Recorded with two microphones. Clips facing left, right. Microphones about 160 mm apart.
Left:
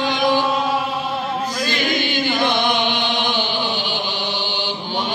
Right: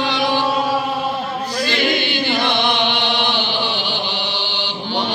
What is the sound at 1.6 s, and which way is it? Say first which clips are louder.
Chant: right 4 dB; 45° left (ahead or behind).